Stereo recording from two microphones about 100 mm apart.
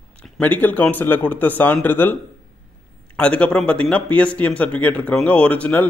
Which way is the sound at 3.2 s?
10° left (ahead or behind).